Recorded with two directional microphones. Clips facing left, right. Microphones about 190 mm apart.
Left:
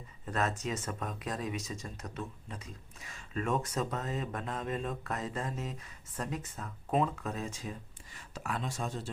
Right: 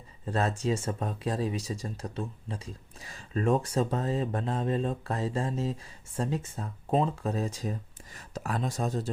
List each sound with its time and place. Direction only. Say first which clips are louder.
0.3 s speech: right 5 dB; 30° right (ahead or behind)